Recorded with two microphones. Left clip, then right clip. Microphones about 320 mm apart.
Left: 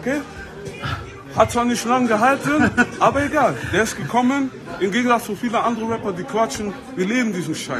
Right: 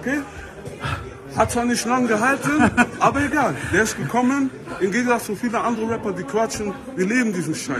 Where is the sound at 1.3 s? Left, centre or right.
Centre.